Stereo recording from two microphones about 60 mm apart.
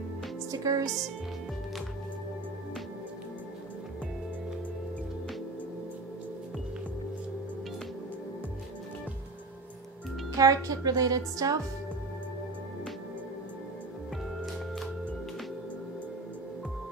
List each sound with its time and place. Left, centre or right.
0.5 s speech: right
0.8 s speech: centre
10.3 s speech: right